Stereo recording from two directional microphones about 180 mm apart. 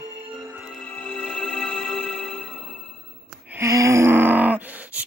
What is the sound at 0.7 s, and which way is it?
Music, 5° left (ahead or behind).